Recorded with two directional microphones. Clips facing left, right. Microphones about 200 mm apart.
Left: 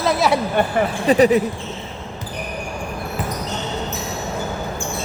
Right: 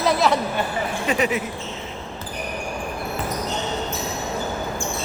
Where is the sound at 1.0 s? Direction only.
35° left (ahead or behind).